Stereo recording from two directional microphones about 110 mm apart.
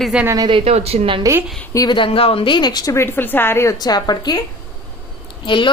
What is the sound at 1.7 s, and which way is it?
Speech, 35° left (ahead or behind).